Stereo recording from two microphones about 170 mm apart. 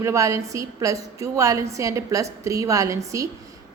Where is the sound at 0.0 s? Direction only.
20° right (ahead or behind).